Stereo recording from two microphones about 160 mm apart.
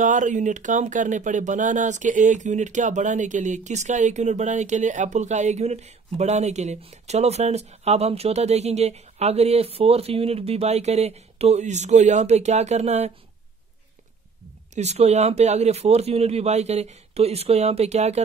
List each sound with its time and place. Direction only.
0.0 s speech: 50° right (ahead or behind)
14.8 s speech: 45° right (ahead or behind)